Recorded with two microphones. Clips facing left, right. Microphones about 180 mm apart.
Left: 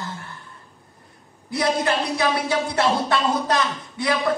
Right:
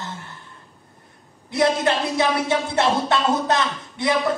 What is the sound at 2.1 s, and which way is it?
Speech, 25° right (ahead or behind).